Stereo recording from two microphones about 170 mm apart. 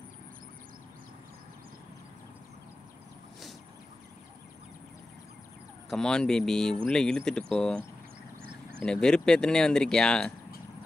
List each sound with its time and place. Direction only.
5.9 s speech: 5° left (ahead or behind)
8.8 s speech: 5° left (ahead or behind)